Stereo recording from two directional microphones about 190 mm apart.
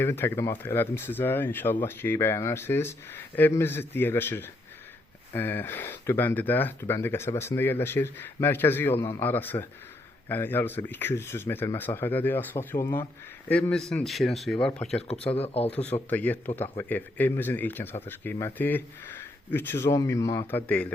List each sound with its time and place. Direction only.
0.0 s speech: 10° left (ahead or behind)
15.0 s speech: 30° left (ahead or behind)
15.7 s speech: 5° left (ahead or behind)